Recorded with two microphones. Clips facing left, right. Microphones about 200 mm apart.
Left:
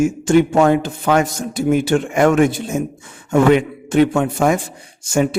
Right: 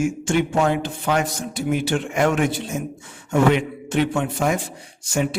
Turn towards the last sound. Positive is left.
turn(degrees=45)  # may be behind; listen again after turning